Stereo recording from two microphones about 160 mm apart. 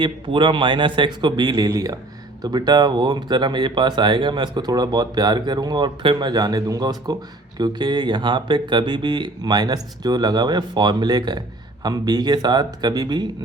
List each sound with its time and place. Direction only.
0.0 s speech: 30° right (ahead or behind)